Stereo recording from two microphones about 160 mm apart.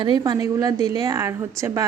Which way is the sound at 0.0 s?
25° right (ahead or behind).